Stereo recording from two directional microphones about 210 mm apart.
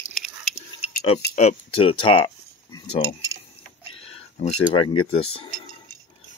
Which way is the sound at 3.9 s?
25° left (ahead or behind).